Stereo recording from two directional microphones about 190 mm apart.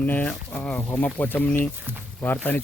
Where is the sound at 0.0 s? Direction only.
10° left (ahead or behind).